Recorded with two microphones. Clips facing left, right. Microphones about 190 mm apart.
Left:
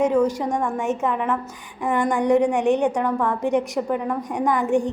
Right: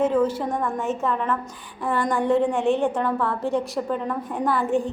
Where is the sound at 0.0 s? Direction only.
15° left (ahead or behind).